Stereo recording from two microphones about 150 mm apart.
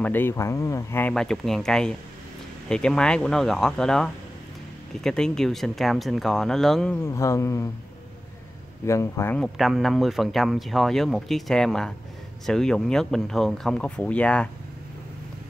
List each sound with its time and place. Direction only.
0.0 s speech: 15° left (ahead or behind)
1.1 s speech: 5° left (ahead or behind)
7.0 s speech: 20° left (ahead or behind)
8.8 s speech: 20° left (ahead or behind)
9.4 s speech: centre (ahead or behind)